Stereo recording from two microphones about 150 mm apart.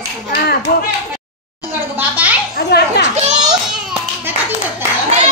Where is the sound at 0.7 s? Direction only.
75° left (ahead or behind).